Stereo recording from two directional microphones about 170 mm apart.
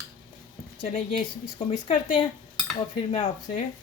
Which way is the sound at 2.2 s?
30° left (ahead or behind).